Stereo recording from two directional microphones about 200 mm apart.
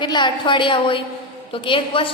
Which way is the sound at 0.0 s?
25° left (ahead or behind).